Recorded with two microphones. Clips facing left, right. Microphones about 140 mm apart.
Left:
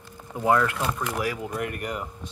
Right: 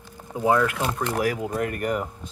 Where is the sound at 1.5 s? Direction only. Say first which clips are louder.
Right 5 dB; 45° right (ahead or behind).